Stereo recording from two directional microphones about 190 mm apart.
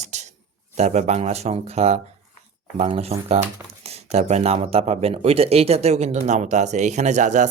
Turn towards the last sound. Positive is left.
turn(degrees=-40)  # may be behind; listen again after turning